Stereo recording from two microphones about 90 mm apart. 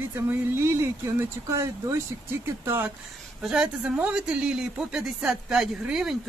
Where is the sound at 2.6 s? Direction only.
20° right (ahead or behind).